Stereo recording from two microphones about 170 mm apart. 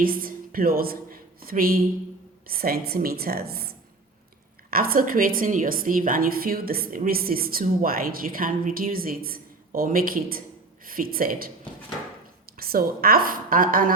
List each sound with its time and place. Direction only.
0.0 s a woman's voice: 60° right (ahead or behind)
12.5 s a woman's voice: 60° right (ahead or behind)